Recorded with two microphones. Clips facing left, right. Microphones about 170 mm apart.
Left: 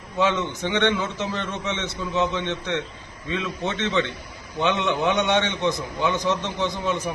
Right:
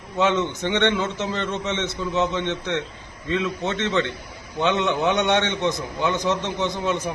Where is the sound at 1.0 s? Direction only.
15° left (ahead or behind).